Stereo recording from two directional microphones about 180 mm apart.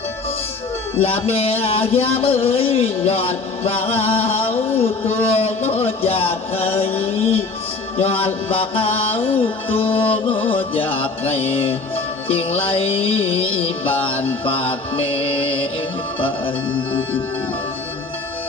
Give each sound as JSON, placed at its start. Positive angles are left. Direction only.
{"t": 0.9, "sound": "speech", "side_deg": 35}
{"t": 14.4, "sound": "music", "side_deg": 30}